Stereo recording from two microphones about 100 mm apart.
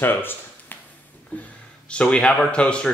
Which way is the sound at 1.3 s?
15° left (ahead or behind).